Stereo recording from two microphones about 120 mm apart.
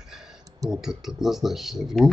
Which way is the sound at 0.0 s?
5° right (ahead or behind).